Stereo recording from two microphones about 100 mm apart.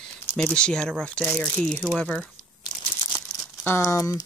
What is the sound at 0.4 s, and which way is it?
Speech, 10° left (ahead or behind).